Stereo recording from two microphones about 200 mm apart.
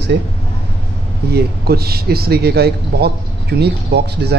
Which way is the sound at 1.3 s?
50° right (ahead or behind).